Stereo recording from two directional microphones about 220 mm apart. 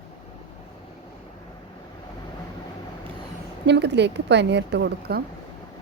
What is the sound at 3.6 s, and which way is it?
A woman's voice, 50° right (ahead or behind).